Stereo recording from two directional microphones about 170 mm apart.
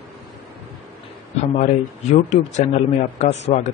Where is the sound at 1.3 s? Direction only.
45° left (ahead or behind).